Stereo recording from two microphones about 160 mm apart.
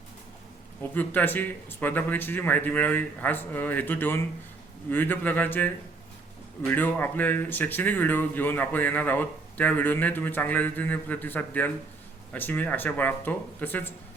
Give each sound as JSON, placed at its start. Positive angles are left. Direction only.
{"t": 0.8, "sound": "speech", "side_deg": 10}